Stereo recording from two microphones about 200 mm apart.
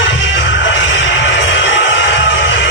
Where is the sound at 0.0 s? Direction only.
70° left (ahead or behind).